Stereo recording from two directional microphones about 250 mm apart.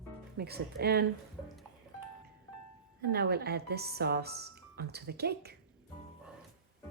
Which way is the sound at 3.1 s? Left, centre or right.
Right.